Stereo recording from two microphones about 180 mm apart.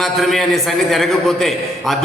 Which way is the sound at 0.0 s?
Centre (ahead or behind).